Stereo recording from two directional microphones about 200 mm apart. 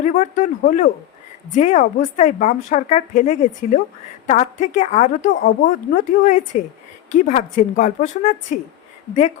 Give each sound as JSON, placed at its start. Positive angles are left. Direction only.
{"t": 0.0, "sound": "a woman's voice", "side_deg": 40}